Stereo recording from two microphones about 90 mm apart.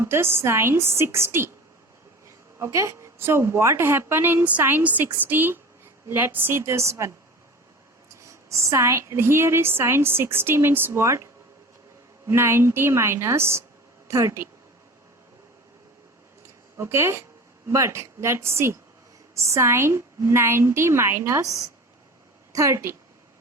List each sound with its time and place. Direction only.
0.0 s a woman's voice: 30° right (ahead or behind)
8.1 s a woman's voice: 35° right (ahead or behind)
12.3 s a woman's voice: 30° right (ahead or behind)
16.7 s a woman's voice: 30° right (ahead or behind)